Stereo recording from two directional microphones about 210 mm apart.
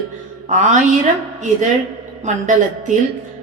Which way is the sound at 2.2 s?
35° right (ahead or behind).